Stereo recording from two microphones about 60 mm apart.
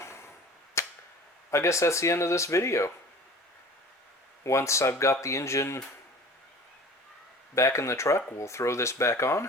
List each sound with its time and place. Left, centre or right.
0.0 s arrow: left
0.8 s cap gun: left
1.5 s speech: left
4.4 s speech: left
7.5 s speech: left